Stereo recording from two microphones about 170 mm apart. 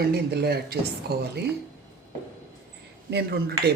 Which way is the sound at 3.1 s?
75° right (ahead or behind).